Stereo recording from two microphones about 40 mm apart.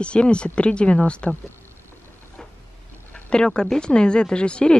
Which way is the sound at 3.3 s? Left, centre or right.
Left.